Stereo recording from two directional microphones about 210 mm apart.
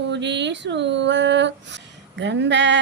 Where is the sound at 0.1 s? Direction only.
55° right (ahead or behind).